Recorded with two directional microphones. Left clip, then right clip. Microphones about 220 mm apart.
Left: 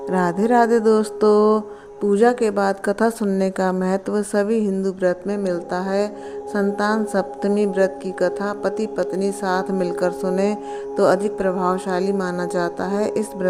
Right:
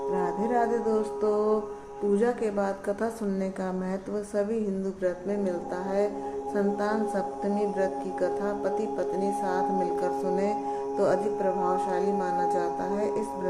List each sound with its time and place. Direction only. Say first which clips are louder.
0.1 s a woman's voice: left 10 dB; 50° left (ahead or behind)